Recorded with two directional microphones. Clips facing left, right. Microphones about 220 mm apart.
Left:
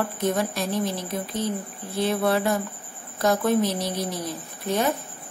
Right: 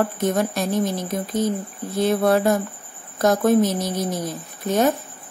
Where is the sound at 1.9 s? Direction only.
45° right (ahead or behind).